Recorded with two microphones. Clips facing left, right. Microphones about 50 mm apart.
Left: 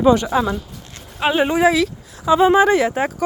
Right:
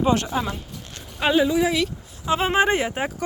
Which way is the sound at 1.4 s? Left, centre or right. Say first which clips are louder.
Left 5 dB; left.